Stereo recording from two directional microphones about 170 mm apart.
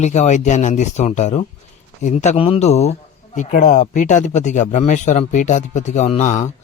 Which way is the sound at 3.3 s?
50° left (ahead or behind).